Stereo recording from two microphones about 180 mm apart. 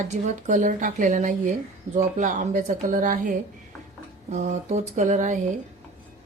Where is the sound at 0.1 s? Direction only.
40° right (ahead or behind).